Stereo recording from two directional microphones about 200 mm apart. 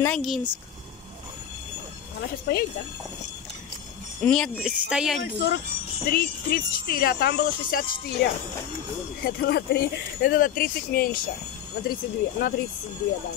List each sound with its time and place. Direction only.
0.0 s speech: 5° left (ahead or behind)
2.5 s speech: 55° left (ahead or behind)
4.2 s speech: 5° left (ahead or behind)
5.2 s speech: 55° left (ahead or behind)